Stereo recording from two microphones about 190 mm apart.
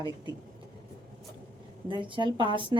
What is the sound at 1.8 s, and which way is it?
Speech, 25° right (ahead or behind).